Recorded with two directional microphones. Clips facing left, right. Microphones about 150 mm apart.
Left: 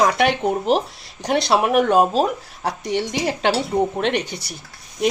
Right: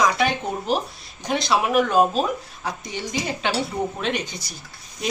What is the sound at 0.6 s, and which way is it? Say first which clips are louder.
Speech: left 5 dB; 80° left.